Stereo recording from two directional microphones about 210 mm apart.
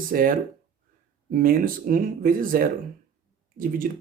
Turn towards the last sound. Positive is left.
turn(degrees=-40)  # may be behind; listen again after turning